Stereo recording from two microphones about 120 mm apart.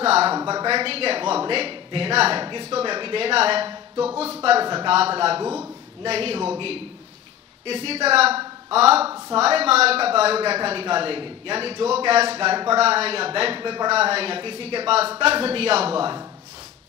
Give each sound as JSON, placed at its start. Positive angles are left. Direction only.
{"t": 0.0, "sound": "a sound", "side_deg": -55}
{"t": 0.4, "sound": "speech", "side_deg": -30}
{"t": 0.7, "sound": "a man's voice", "side_deg": -50}
{"t": 4.6, "sound": "speech", "side_deg": -40}
{"t": 4.9, "sound": "a man's voice", "side_deg": -55}
{"t": 5.4, "sound": "a man's voice", "side_deg": -20}
{"t": 6.0, "sound": "a man's voice", "side_deg": -55}
{"t": 13.9, "sound": "a man's voice", "side_deg": -55}